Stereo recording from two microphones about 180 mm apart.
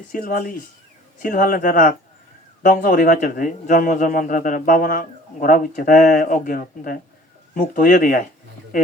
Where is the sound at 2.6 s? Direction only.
60° left (ahead or behind).